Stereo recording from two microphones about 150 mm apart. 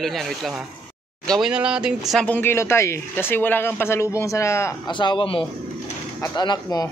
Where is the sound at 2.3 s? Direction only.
15° left (ahead or behind).